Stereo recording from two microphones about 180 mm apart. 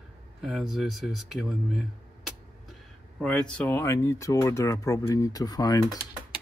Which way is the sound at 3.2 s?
5° left (ahead or behind).